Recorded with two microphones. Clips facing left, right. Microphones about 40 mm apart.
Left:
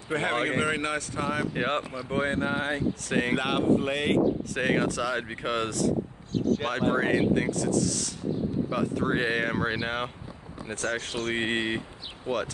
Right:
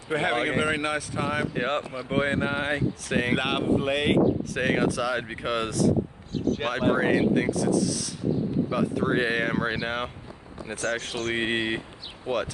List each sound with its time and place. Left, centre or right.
0.1 s speech: centre
1.5 s speech: centre
2.0 s speech: right
3.1 s speech: centre
12.3 s speech: right